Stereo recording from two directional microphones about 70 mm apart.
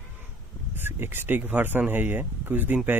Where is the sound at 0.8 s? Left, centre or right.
Right.